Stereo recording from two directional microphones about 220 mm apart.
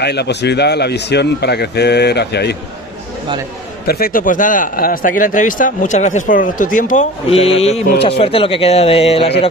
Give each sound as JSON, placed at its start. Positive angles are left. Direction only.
{"t": 0.0, "sound": "speech", "side_deg": 50}
{"t": 3.8, "sound": "a man's voice", "side_deg": 45}